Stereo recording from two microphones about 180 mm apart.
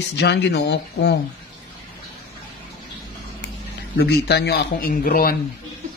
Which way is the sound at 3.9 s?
65° left (ahead or behind).